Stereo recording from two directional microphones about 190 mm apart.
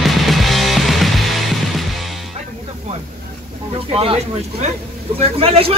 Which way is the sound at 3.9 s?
30° right (ahead or behind).